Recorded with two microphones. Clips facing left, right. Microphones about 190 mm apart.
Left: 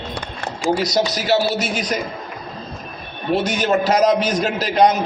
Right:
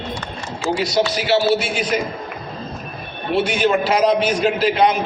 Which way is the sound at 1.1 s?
40° left (ahead or behind).